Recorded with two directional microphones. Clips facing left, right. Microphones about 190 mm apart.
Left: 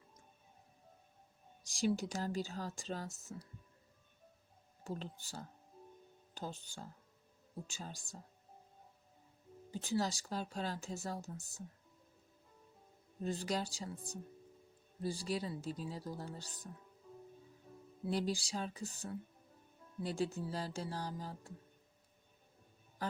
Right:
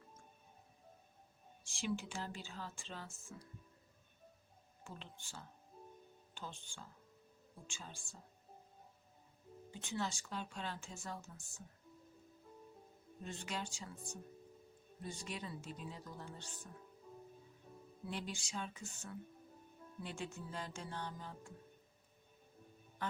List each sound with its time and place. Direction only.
1.8 s speech: 40° left (ahead or behind)
4.8 s speech: 40° left (ahead or behind)
9.7 s speech: 35° left (ahead or behind)
13.2 s speech: 35° left (ahead or behind)
18.0 s speech: 35° left (ahead or behind)
23.0 s speech: 35° left (ahead or behind)